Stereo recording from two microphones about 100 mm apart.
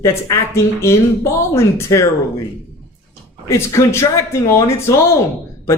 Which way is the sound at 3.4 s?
25° left (ahead or behind).